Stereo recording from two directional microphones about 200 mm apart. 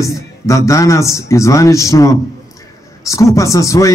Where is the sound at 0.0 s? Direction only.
15° left (ahead or behind).